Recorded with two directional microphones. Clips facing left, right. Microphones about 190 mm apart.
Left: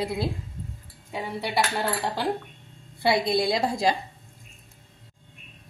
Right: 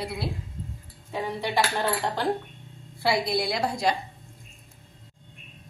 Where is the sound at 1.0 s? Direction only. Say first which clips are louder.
Right 1 dB; 10° left (ahead or behind).